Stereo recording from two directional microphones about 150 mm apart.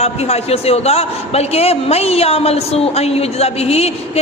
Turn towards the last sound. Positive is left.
turn(degrees=45)  # may be behind; listen again after turning